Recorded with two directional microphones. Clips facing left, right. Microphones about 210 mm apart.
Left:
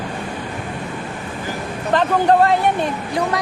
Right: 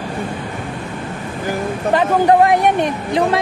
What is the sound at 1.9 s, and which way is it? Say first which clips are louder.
Speech: right 2 dB; 10° right (ahead or behind).